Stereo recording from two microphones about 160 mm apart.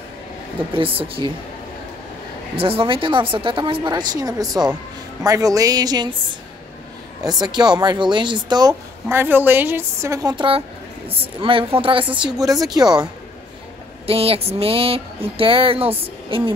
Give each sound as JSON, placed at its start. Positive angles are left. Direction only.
{"t": 0.7, "sound": "speech", "side_deg": -35}
{"t": 2.5, "sound": "speech", "side_deg": -35}
{"t": 7.2, "sound": "speech", "side_deg": -25}
{"t": 9.1, "sound": "a woman's voice", "side_deg": -15}
{"t": 14.0, "sound": "a woman's voice", "side_deg": -35}